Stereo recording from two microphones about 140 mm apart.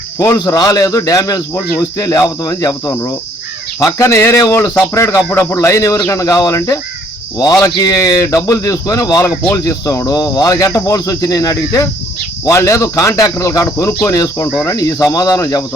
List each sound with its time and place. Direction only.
0.2 s cricket: 25° left (ahead or behind)